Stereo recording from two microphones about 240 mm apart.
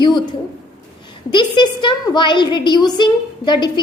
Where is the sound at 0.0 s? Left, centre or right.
Centre.